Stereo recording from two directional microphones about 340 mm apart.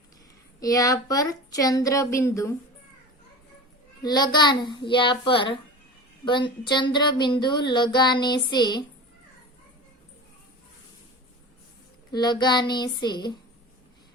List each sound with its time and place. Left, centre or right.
0.6 s speech: centre
4.0 s speech: centre
12.1 s speech: centre